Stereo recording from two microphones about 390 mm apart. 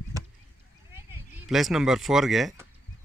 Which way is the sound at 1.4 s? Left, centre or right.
Centre.